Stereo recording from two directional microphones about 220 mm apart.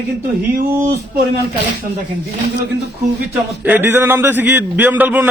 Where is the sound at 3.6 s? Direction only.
10° right (ahead or behind).